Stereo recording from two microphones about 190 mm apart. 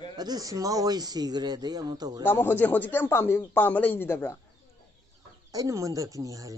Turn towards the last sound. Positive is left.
turn(degrees=-15)  # may be behind; listen again after turning